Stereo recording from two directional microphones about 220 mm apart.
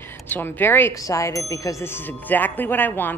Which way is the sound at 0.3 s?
10° left (ahead or behind).